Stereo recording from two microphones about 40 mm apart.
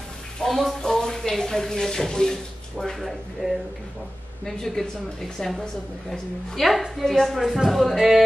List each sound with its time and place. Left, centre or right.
0.4 s speech: centre
0.7 s a sound: centre
1.3 s speech: centre
4.5 s speech: centre
6.5 s speech: centre